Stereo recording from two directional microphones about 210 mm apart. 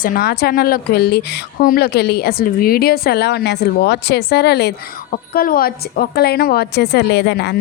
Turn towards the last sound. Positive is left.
turn(degrees=50)  # may be behind; listen again after turning